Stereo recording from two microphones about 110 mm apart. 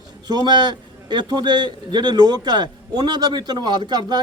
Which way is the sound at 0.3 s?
40° right (ahead or behind).